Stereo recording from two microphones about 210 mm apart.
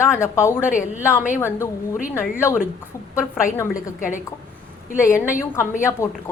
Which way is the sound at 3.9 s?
40° left (ahead or behind).